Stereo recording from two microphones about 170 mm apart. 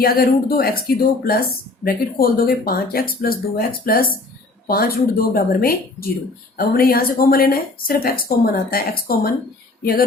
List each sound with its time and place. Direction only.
0.0 s speech: 60° left (ahead or behind)